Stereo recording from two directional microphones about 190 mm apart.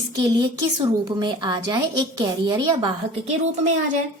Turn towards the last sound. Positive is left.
turn(degrees=-40)  # may be behind; listen again after turning